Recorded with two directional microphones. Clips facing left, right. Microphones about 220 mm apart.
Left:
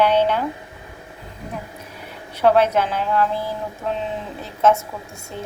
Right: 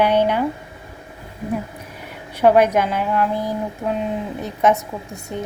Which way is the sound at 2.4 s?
10° right (ahead or behind).